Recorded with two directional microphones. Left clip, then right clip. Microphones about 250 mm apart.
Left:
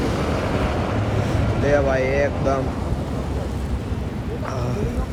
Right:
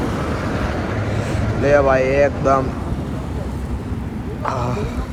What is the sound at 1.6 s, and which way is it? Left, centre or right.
Speech, centre.